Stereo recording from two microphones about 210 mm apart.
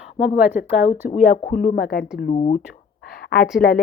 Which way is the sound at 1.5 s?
40° left (ahead or behind).